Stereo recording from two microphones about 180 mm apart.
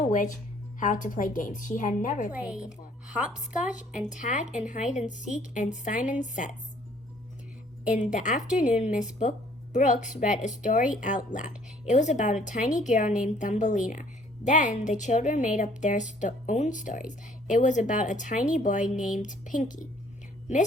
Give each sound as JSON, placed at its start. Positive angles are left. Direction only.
{"t": 0.0, "sound": "a woman's voice", "side_deg": 45}
{"t": 2.3, "sound": "a woman's voice", "side_deg": -5}
{"t": 4.1, "sound": "a woman's voice", "side_deg": 45}
{"t": 7.9, "sound": "a woman's voice", "side_deg": 40}